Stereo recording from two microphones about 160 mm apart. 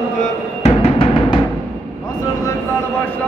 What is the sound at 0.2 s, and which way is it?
Music, 40° left (ahead or behind).